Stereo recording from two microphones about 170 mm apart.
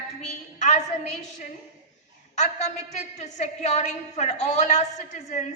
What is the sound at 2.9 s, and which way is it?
A woman's voice, 40° left (ahead or behind).